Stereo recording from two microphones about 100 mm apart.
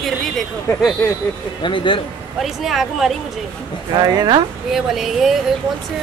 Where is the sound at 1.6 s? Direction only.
55° left (ahead or behind).